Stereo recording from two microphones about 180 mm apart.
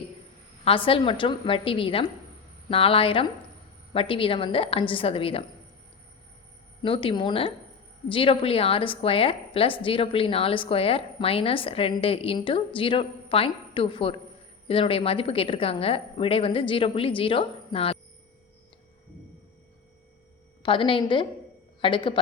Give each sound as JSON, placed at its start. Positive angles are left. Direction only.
{"t": 0.6, "sound": "a woman's voice", "side_deg": 30}
{"t": 6.8, "sound": "a woman's voice", "side_deg": 30}
{"t": 20.6, "sound": "a woman's voice", "side_deg": 30}